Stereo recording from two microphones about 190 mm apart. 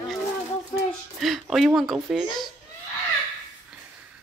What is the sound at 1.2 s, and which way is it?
Speech, centre (ahead or behind).